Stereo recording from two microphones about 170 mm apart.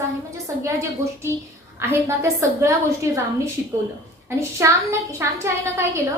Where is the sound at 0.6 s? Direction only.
15° right (ahead or behind).